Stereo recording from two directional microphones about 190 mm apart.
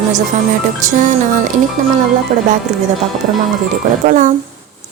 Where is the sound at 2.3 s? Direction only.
40° right (ahead or behind).